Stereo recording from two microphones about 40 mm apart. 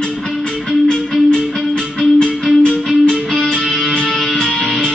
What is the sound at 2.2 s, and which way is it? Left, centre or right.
Music, left.